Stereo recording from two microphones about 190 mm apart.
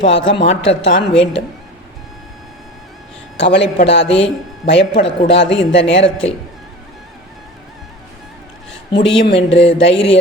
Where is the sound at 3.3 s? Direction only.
70° left (ahead or behind).